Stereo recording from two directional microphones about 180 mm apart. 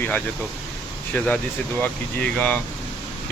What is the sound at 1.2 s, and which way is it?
Speech, 10° left (ahead or behind).